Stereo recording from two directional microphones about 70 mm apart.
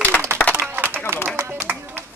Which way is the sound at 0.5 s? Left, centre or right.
Right.